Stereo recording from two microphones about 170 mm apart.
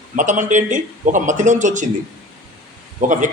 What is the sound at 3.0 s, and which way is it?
Speech, 50° right (ahead or behind).